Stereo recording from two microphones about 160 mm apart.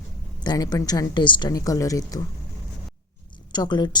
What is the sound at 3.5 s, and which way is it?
Speech, 30° left (ahead or behind).